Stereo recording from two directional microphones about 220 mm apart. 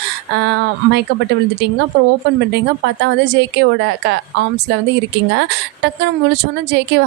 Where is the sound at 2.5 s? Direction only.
50° right (ahead or behind).